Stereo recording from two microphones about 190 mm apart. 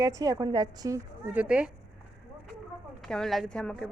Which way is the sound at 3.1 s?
Centre (ahead or behind).